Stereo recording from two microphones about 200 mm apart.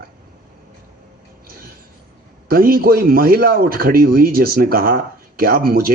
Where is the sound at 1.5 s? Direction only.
45° right (ahead or behind).